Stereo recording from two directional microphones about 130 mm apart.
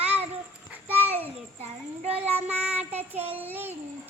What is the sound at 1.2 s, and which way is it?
Child singing, 55° right (ahead or behind).